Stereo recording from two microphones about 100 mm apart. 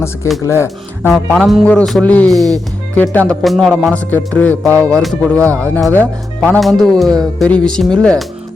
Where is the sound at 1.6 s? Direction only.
10° left (ahead or behind).